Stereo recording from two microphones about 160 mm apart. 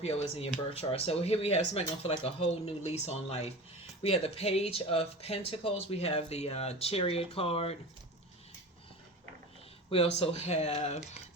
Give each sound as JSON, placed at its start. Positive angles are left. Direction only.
{"t": 0.0, "sound": "speech", "side_deg": 40}
{"t": 9.9, "sound": "speech", "side_deg": 40}